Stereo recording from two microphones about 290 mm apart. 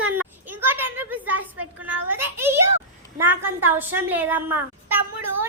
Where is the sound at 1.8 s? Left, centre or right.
Centre.